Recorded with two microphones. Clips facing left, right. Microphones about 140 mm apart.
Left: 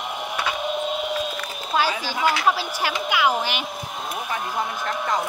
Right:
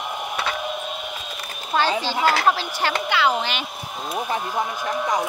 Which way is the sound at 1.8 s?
10° left (ahead or behind).